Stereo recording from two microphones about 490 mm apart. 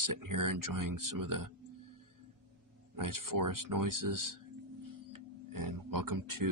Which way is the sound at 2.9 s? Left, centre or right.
Right.